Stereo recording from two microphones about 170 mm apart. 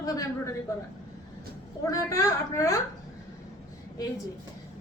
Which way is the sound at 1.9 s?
20° left (ahead or behind).